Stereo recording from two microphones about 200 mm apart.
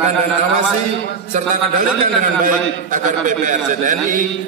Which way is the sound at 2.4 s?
40° right (ahead or behind).